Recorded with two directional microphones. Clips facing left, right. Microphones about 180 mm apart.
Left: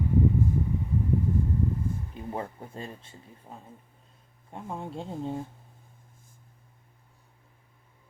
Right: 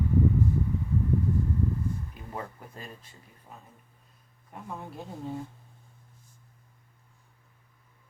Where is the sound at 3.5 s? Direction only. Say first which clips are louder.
Left 3 dB; 30° left (ahead or behind).